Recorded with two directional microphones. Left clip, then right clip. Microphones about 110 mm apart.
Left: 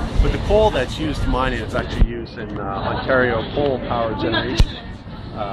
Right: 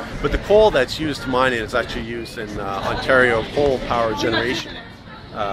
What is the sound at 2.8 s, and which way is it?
Speech, 50° right (ahead or behind).